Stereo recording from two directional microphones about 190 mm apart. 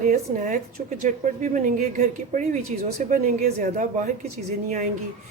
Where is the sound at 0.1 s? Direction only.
40° right (ahead or behind).